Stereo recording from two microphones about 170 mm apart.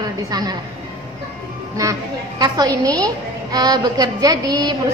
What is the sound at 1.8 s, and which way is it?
A woman's voice, 20° right (ahead or behind).